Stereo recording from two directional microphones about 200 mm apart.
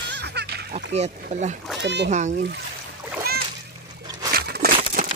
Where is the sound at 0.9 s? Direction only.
35° right (ahead or behind).